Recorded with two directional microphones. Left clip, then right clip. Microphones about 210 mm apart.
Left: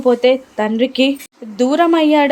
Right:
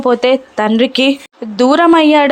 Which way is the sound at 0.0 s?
15° right (ahead or behind).